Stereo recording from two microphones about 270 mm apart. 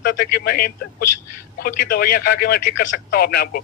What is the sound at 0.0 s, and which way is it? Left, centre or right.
A man's voice, left.